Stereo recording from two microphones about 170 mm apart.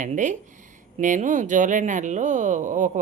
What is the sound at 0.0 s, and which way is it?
Speech, 45° right (ahead or behind).